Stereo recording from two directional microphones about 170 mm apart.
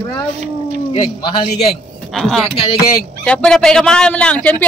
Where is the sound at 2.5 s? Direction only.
30° left (ahead or behind).